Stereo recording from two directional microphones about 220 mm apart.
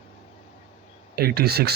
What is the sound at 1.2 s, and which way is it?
Speech, 45° right (ahead or behind).